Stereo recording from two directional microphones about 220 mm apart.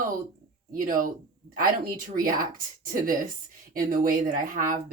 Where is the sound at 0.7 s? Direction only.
40° right (ahead or behind).